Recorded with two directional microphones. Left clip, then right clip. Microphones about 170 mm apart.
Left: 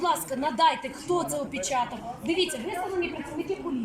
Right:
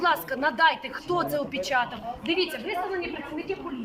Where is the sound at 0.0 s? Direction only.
15° left (ahead or behind).